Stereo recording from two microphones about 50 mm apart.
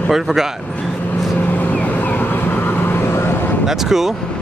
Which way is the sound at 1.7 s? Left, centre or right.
Left.